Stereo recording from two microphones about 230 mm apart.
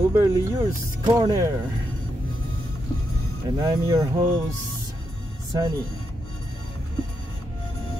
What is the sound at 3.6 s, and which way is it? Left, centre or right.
Speech, centre.